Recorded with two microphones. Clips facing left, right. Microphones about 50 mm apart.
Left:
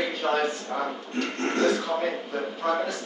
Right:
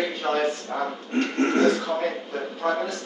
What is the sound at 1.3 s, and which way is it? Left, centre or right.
Speech, right.